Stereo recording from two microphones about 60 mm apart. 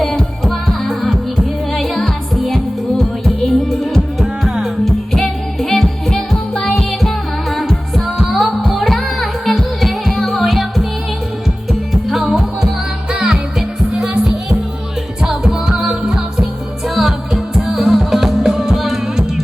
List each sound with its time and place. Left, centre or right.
0.0 s music: centre
6.5 s music: centre
6.7 s music: centre
12.0 s music: centre
13.1 s music: centre
15.2 s music: centre